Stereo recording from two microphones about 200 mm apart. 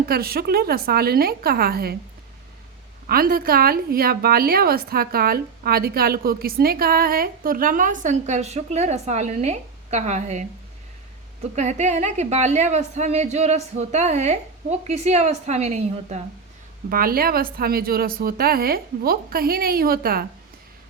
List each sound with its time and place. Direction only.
0.0 s a woman's voice: 50° right (ahead or behind)
3.1 s a woman's voice: 45° right (ahead or behind)
11.5 s a woman's voice: 35° right (ahead or behind)
16.9 s a woman's voice: 45° right (ahead or behind)